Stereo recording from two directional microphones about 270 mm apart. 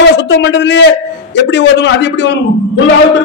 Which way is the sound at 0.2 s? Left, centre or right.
Left.